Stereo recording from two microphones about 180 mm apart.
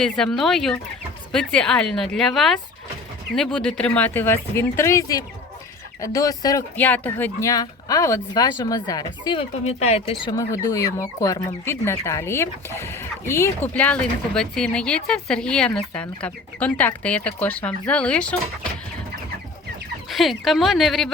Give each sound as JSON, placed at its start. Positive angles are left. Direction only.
{"t": 0.0, "sound": "a woman's voice", "side_deg": 5}
{"t": 6.7, "sound": "speech", "side_deg": 10}
{"t": 20.1, "sound": "a woman's voice", "side_deg": 0}